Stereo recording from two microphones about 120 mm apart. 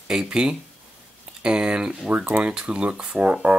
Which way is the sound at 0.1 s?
5° right (ahead or behind).